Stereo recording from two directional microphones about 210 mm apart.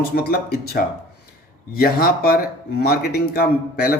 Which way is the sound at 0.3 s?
45° left (ahead or behind).